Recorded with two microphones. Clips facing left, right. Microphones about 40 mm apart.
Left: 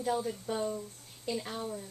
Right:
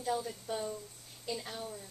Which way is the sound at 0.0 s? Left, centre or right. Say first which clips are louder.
Left 3 dB; centre.